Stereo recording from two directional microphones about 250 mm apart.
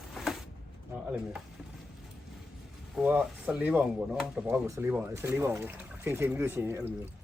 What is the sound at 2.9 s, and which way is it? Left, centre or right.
Speech, centre.